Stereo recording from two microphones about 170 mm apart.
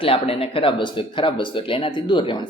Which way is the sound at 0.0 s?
35° left (ahead or behind).